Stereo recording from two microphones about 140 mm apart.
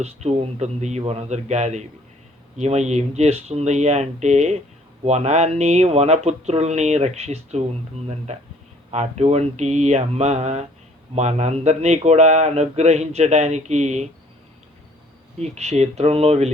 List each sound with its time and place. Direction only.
0.0 s a man's voice: 50° right (ahead or behind)
15.4 s a man's voice: 50° right (ahead or behind)